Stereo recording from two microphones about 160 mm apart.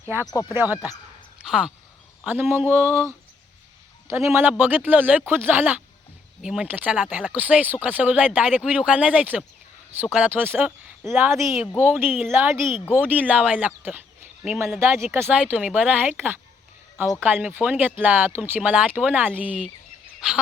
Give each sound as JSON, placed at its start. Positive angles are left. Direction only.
{"t": 0.4, "sound": "speech", "side_deg": -10}
{"t": 4.1, "sound": "speech", "side_deg": -15}